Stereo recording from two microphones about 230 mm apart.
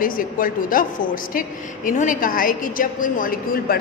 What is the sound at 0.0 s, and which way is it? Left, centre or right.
A woman's voice, left.